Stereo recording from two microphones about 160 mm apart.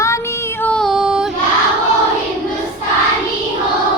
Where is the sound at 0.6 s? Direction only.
5° left (ahead or behind).